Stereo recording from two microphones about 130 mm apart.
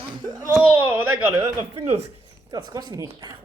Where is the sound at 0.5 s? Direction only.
15° right (ahead or behind).